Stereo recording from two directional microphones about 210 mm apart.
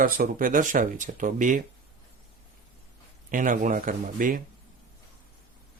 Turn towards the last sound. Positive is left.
turn(degrees=-40)  # may be behind; listen again after turning